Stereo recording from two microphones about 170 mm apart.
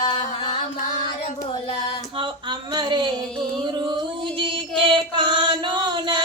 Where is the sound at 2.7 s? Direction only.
25° right (ahead or behind).